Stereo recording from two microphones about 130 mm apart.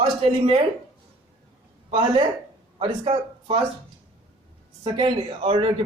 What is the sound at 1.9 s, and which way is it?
Speech, 40° right (ahead or behind).